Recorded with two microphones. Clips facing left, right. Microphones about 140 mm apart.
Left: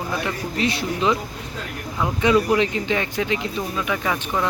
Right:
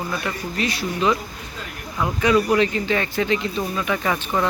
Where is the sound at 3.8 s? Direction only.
Centre (ahead or behind).